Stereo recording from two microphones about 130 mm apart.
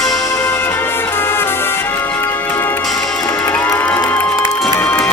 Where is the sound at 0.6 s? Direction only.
20° left (ahead or behind).